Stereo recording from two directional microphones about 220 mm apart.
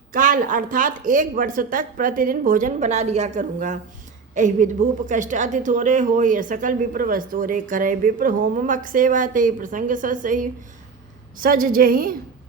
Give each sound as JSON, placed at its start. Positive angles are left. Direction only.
{"t": 0.1, "sound": "a woman's voice", "side_deg": -40}